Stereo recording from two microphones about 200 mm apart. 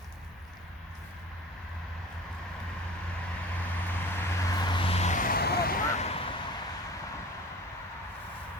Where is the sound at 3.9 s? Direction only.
15° left (ahead or behind); by 5.8 s 50° left (ahead or behind).